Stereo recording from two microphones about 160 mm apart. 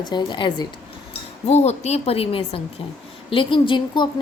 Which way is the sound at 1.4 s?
45° left (ahead or behind).